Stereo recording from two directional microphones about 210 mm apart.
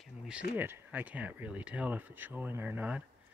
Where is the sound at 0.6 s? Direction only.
10° right (ahead or behind).